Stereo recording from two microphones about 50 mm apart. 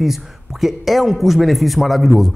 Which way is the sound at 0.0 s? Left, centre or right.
Centre.